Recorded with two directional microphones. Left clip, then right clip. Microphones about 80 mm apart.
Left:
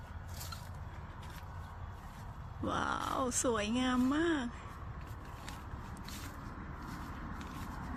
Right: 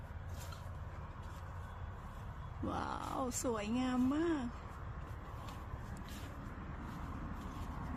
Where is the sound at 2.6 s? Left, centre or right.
Centre.